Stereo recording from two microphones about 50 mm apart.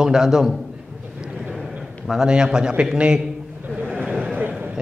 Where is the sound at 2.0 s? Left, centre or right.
Centre.